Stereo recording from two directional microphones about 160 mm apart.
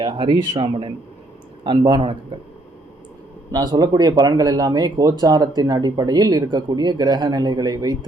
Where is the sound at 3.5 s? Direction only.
25° right (ahead or behind).